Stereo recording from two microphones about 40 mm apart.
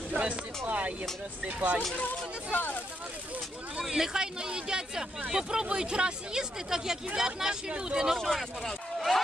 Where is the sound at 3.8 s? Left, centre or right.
Centre.